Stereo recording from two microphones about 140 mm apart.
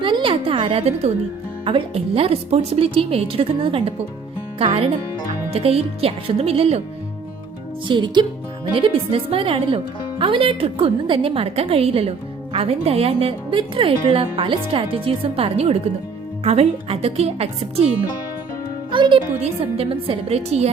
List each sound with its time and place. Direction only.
0.0 s a sound: 35° right (ahead or behind)
1.6 s a woman's voice: 40° right (ahead or behind)
7.9 s a woman's voice: 35° right (ahead or behind)
18.9 s a woman's voice: 35° right (ahead or behind)